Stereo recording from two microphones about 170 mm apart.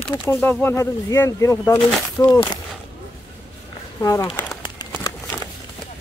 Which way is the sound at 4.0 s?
20° left (ahead or behind).